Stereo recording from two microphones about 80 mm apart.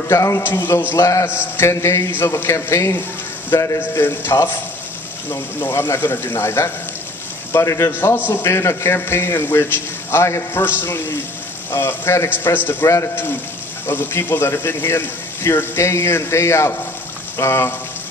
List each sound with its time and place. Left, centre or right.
0.1 s speech: left
0.4 s speech: left
0.9 s speech: left
1.2 s speech: left
7.9 s speech: left
12.8 s speech: left
13.1 s speech: left